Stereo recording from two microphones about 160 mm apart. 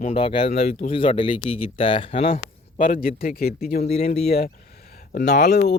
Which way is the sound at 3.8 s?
40° left (ahead or behind).